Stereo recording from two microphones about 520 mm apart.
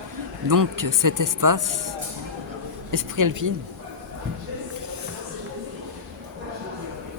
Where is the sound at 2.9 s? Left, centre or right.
Right.